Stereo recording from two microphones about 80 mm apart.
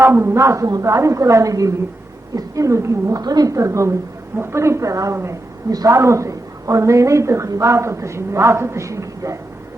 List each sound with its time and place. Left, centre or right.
0.0 s a woman's voice: right
3.2 s a woman's voice: right